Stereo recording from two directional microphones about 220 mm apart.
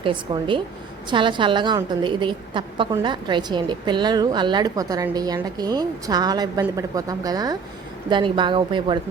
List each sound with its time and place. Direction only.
0.0 s a woman's voice: 20° right (ahead or behind)